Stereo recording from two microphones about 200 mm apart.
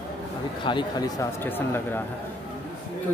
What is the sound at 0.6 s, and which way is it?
Speech, 20° left (ahead or behind).